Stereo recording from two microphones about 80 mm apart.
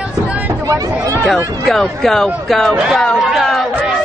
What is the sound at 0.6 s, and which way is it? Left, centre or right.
Speech, right.